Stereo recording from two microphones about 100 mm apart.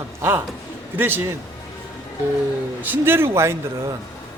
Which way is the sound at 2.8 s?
20° right (ahead or behind).